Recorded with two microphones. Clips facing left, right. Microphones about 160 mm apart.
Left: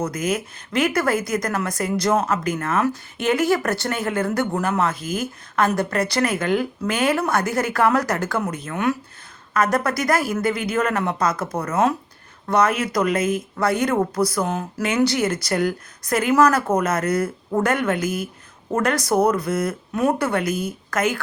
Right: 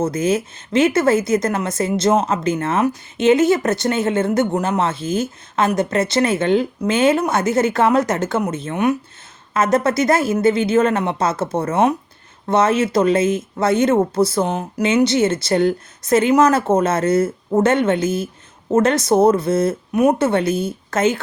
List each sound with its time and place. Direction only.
0.0 s a woman's voice: 25° right (ahead or behind)